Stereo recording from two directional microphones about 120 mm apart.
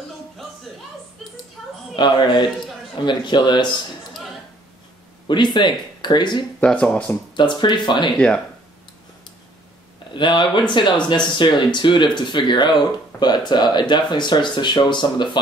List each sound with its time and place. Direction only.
1.6 s a sound: centre (ahead or behind)
2.0 s speech: 40° left (ahead or behind)
5.3 s speech: 40° left (ahead or behind)
6.6 s speech: 10° left (ahead or behind)
7.3 s speech: 40° left (ahead or behind)
10.1 s speech: 40° left (ahead or behind)